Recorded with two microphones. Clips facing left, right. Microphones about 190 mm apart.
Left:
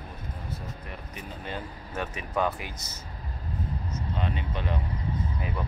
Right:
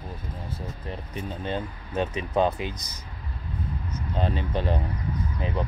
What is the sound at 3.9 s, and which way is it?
Speech, 35° right (ahead or behind).